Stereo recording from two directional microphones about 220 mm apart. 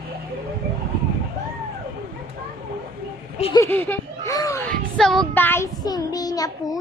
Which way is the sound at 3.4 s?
25° left (ahead or behind).